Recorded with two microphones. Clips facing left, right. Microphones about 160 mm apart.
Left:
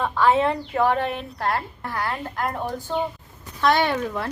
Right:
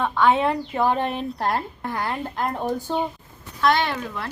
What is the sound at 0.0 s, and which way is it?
Speech, centre (ahead or behind).